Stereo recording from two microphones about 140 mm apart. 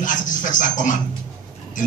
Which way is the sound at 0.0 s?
70° left (ahead or behind).